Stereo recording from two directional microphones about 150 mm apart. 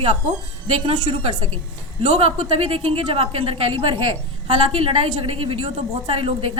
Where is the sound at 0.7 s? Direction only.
40° right (ahead or behind).